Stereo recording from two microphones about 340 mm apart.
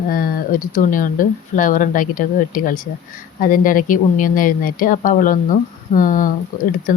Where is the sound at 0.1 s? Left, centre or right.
Left.